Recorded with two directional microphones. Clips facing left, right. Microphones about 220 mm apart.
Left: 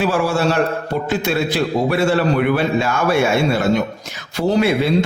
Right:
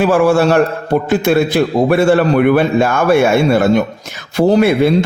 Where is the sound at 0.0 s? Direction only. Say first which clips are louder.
Right 7 dB; 50° right (ahead or behind).